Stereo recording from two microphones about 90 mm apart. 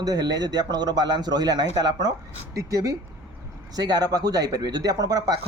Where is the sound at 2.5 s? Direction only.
40° right (ahead or behind).